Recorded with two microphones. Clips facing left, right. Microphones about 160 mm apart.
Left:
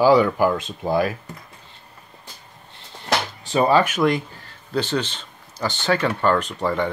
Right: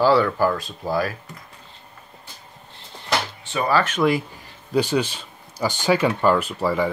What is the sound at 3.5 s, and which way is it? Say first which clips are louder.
Speech: left 6 dB; 30° left (ahead or behind).